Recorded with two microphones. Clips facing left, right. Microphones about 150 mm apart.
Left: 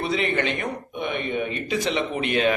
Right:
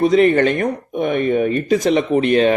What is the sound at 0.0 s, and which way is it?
Speech, 45° right (ahead or behind).